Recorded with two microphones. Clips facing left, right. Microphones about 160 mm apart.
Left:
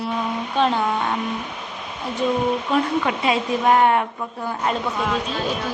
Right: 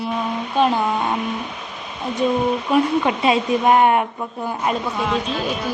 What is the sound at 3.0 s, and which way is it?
Speech, 25° right (ahead or behind).